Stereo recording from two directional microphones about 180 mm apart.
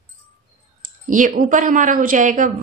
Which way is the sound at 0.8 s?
50° right (ahead or behind).